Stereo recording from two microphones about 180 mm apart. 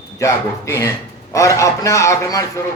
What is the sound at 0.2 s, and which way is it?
A man's voice, 15° left (ahead or behind).